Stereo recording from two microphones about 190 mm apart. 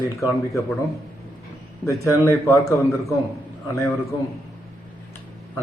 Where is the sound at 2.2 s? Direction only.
15° left (ahead or behind).